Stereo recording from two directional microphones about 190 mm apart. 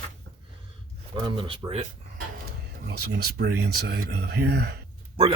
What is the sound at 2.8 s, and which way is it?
Speech, 60° right (ahead or behind).